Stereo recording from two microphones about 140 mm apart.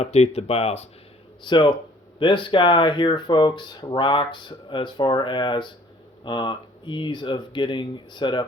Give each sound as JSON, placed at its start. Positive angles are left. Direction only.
{"t": 0.0, "sound": "speech", "side_deg": 50}
{"t": 1.5, "sound": "speech", "side_deg": 35}